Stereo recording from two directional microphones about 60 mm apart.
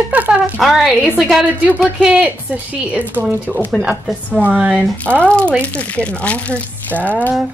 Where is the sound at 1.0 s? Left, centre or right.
Centre.